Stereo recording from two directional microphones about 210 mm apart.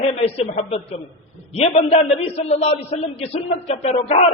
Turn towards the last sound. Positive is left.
turn(degrees=30)  # may be behind; listen again after turning